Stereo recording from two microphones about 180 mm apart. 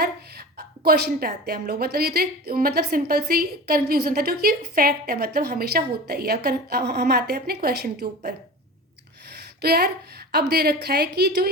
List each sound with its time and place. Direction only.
0.0 s a woman's voice: 60° right (ahead or behind)
9.3 s a sound: 65° right (ahead or behind)
10.3 s a woman's voice: 65° right (ahead or behind)